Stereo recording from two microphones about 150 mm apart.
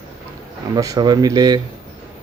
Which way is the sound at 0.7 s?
25° right (ahead or behind).